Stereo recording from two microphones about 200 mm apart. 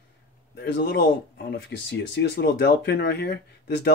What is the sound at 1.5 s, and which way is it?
Speech, 60° left (ahead or behind).